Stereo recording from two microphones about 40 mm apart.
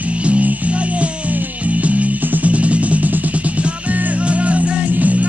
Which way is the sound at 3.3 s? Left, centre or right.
Right.